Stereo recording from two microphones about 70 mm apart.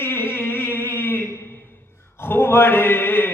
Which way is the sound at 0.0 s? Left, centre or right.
Left.